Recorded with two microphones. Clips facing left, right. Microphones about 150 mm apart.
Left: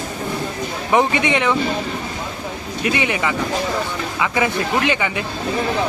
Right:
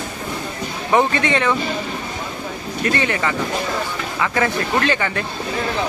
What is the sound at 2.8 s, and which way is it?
Speech, 15° left (ahead or behind).